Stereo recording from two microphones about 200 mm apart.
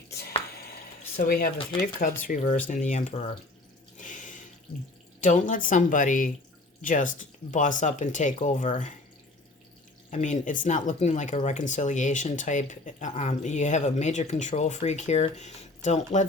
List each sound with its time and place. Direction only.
0.1 s drip: 50° left (ahead or behind)
1.1 s speech: 50° left (ahead or behind)
3.9 s water: 40° left (ahead or behind)
5.2 s speech: 40° left (ahead or behind)
10.1 s speech: 35° left (ahead or behind)